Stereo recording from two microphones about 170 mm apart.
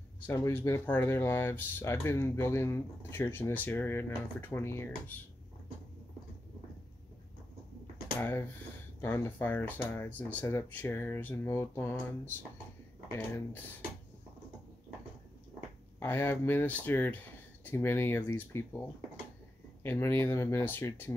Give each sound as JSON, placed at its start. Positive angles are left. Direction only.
{"t": 0.3, "sound": "speech", "side_deg": 15}
{"t": 8.2, "sound": "speech", "side_deg": 10}
{"t": 13.1, "sound": "speech", "side_deg": 10}
{"t": 16.0, "sound": "speech", "side_deg": 10}